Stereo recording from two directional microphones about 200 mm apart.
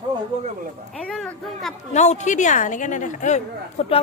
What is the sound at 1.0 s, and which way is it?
Speech, 5° left (ahead or behind).